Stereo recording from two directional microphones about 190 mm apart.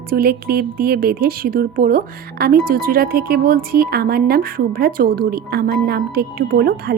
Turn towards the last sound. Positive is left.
turn(degrees=-50)  # may be behind; listen again after turning